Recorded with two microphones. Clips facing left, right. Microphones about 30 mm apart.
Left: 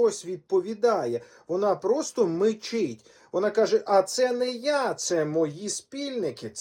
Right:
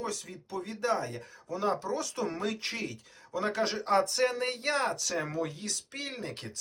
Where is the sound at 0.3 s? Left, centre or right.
Centre.